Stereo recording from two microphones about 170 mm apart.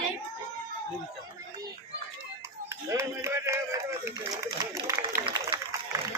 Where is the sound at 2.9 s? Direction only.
15° right (ahead or behind).